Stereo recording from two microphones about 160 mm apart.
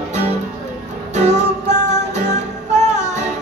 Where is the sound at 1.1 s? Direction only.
45° right (ahead or behind).